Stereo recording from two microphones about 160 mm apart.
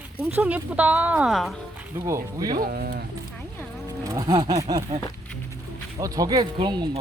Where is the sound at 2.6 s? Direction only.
70° right (ahead or behind).